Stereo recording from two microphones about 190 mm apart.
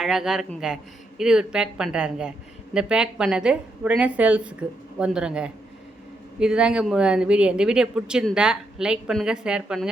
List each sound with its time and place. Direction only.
0.0 s speech: centre (ahead or behind)